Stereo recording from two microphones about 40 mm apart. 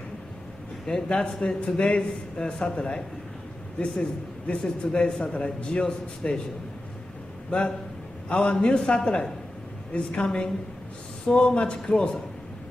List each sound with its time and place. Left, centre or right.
1.0 s a man's voice: left
4.5 s a man's voice: left
7.5 s a man's voice: left